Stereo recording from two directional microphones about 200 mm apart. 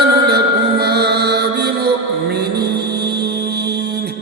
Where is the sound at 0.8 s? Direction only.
55° right (ahead or behind).